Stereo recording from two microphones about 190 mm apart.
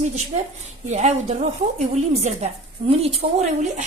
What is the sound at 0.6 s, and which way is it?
Speech, 35° right (ahead or behind).